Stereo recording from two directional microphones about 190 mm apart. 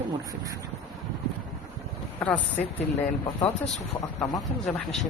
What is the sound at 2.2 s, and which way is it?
Speech, 10° left (ahead or behind).